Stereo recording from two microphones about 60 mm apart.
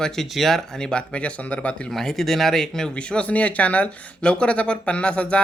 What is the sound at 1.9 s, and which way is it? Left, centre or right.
Speech, centre.